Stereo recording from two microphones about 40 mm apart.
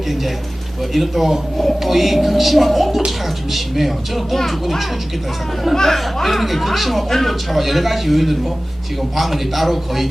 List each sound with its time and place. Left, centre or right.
0.1 s a man's voice: centre